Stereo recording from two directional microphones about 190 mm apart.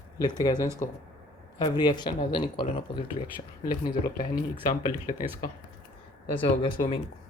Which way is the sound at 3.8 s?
50° left (ahead or behind).